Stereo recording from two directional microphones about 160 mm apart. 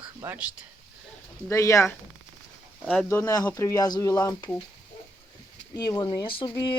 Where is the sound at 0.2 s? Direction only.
15° right (ahead or behind).